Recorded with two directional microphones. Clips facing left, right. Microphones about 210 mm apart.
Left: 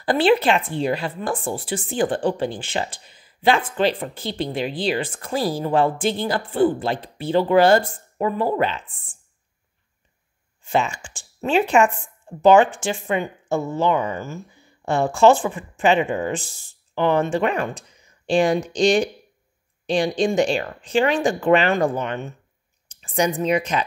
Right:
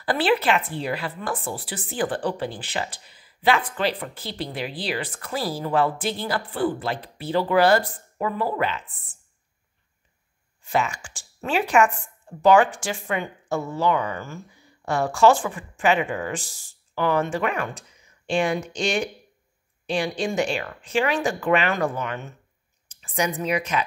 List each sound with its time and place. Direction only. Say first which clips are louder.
0.0 s a woman's voice: left 4 dB; 25° left (ahead or behind)
10.6 s a woman's voice: left 3 dB; 25° left (ahead or behind)